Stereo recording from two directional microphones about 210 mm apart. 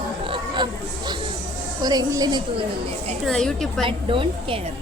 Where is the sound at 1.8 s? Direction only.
20° right (ahead or behind).